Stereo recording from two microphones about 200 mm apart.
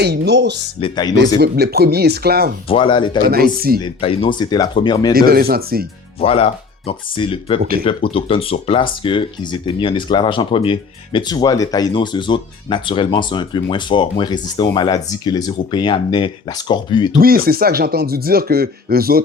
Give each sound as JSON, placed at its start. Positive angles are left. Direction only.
{"t": 0.0, "sound": "speech", "side_deg": -55}
{"t": 0.8, "sound": "speech", "side_deg": 25}
{"t": 1.4, "sound": "speech", "side_deg": -55}
{"t": 2.6, "sound": "speech", "side_deg": 25}
{"t": 3.2, "sound": "speech", "side_deg": -50}
{"t": 3.8, "sound": "speech", "side_deg": 25}
{"t": 5.1, "sound": "speech", "side_deg": -50}
{"t": 6.2, "sound": "speech", "side_deg": 30}
{"t": 7.6, "sound": "speech", "side_deg": -45}
{"t": 7.9, "sound": "speech", "side_deg": 25}
{"t": 17.2, "sound": "speech", "side_deg": -50}